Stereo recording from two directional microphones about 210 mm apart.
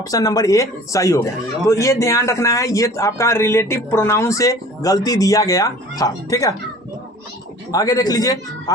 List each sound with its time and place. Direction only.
0.0 s speech: 15° left (ahead or behind)
7.7 s speech: 15° left (ahead or behind)